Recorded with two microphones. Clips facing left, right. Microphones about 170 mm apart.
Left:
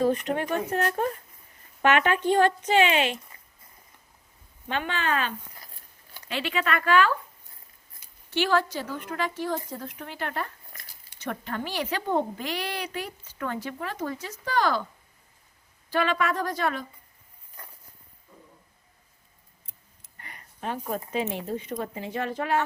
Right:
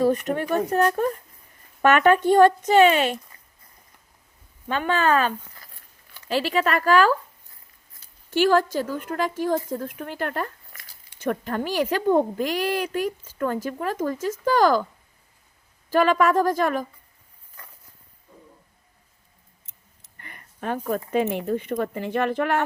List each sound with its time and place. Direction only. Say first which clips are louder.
0.0 s a woman's voice: right 3 dB; 40° right (ahead or behind)
4.7 s speech: right 7 dB; 45° right (ahead or behind)
8.3 s a woman's voice: right 5 dB; 45° right (ahead or behind)
15.9 s a woman's voice: right 7 dB; 45° right (ahead or behind)
20.6 s speech: right 5 dB; 55° right (ahead or behind)